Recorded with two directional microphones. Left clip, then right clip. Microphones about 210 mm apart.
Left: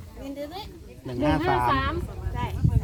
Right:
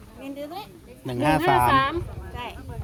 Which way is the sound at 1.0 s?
55° right (ahead or behind).